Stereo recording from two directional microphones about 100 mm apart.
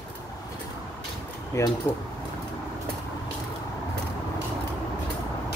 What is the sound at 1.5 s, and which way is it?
Speech, 30° left (ahead or behind).